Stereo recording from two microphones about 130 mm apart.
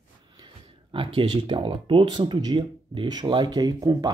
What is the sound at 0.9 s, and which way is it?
Speech, 40° right (ahead or behind).